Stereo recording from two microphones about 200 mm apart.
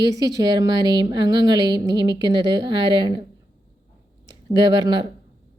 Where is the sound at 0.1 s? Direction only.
20° right (ahead or behind).